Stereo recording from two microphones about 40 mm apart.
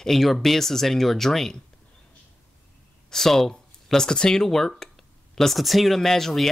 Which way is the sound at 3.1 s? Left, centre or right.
Centre.